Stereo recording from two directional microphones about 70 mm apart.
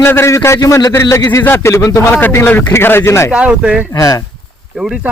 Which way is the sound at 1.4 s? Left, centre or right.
Left.